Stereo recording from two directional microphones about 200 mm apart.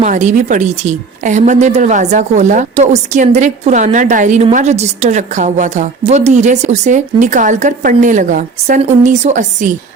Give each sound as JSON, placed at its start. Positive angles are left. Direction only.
{"t": 0.0, "sound": "a woman's voice", "side_deg": -35}